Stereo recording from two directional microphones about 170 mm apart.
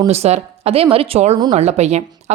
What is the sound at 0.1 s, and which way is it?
A woman's voice, 40° right (ahead or behind).